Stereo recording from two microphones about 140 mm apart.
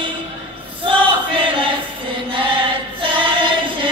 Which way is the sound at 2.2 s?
35° right (ahead or behind).